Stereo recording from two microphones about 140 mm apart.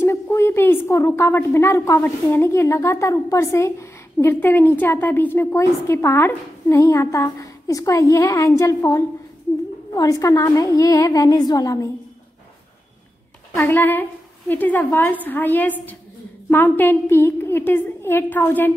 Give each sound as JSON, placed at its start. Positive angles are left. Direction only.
{"t": 0.0, "sound": "a woman's voice", "side_deg": 20}
{"t": 13.6, "sound": "a woman's voice", "side_deg": 15}